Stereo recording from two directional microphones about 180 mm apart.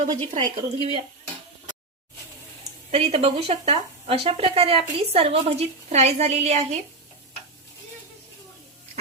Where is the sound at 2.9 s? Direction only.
30° right (ahead or behind).